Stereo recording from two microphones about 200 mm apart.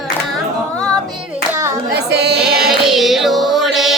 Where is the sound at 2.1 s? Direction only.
55° right (ahead or behind).